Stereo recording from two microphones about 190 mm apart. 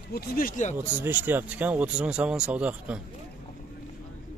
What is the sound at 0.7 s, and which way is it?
Speech, 10° right (ahead or behind).